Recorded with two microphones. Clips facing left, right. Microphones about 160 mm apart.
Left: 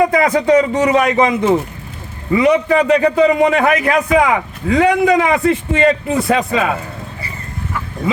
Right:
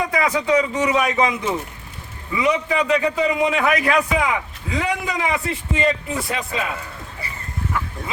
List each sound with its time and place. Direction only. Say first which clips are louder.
0.0 s a man's voice: left 8 dB; 50° left (ahead or behind)
4.2 s a man's voice: left 8 dB; 70° left (ahead or behind); by 6.7 s 90° left